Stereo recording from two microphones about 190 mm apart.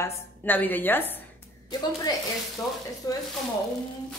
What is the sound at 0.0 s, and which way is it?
A woman's voice, 10° left (ahead or behind).